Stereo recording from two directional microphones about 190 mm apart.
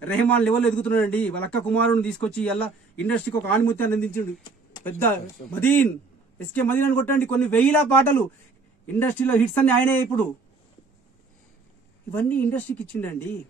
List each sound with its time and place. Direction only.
0.0 s a man's voice: 5° left (ahead or behind)
4.4 s a sound: 25° left (ahead or behind)
4.8 s a man's voice: 10° left (ahead or behind)
12.1 s a man's voice: 10° left (ahead or behind)